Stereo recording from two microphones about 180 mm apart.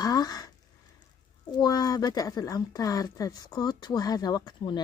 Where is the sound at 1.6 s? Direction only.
20° left (ahead or behind).